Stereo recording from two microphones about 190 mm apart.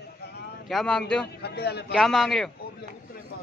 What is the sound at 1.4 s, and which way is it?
Speech, 60° left (ahead or behind).